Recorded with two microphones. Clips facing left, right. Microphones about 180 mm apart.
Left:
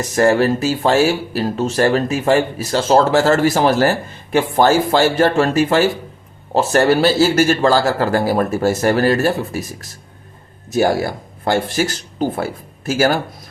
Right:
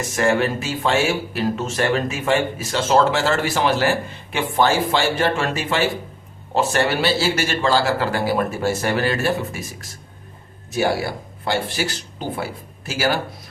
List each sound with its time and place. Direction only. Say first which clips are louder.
0.2 s speech: left 6 dB; 40° left (ahead or behind)
10.7 s speech: left 5 dB; 45° left (ahead or behind)